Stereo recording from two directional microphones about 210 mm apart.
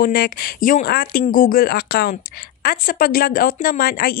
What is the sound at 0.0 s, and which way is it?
A woman's voice, 45° left (ahead or behind).